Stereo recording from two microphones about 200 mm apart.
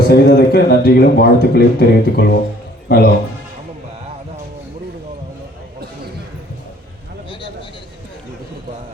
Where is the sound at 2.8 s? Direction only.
55° left (ahead or behind).